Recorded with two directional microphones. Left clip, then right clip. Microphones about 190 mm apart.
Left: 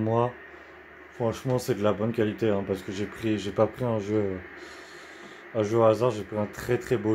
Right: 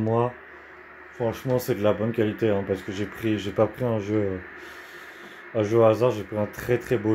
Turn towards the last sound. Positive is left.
turn(degrees=-5)  # may be behind; listen again after turning